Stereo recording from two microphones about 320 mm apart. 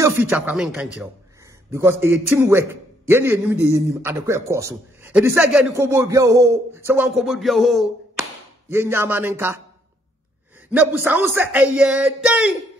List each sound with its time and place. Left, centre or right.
0.0 s a man's voice: centre
10.7 s speech: centre